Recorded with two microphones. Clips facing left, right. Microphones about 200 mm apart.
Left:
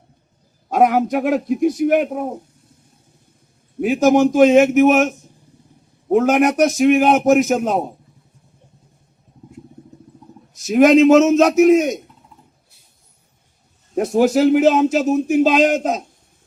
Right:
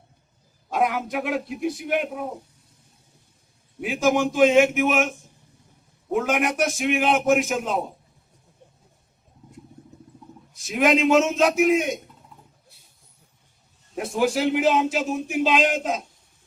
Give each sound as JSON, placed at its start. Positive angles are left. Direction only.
{"t": 0.7, "sound": "speech", "side_deg": 45}
{"t": 3.8, "sound": "a man's voice", "side_deg": 40}
{"t": 10.5, "sound": "speech", "side_deg": 40}
{"t": 13.9, "sound": "speech", "side_deg": 45}